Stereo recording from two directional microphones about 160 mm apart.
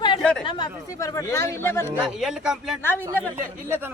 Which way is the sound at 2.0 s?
5° right (ahead or behind).